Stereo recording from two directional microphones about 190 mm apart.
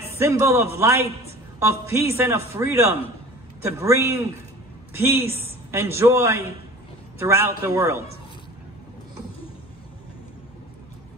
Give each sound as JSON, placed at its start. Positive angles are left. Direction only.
{"t": 0.2, "sound": "a man's voice", "side_deg": -15}